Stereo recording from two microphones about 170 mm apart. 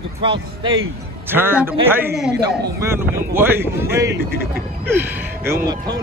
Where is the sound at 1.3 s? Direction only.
10° right (ahead or behind).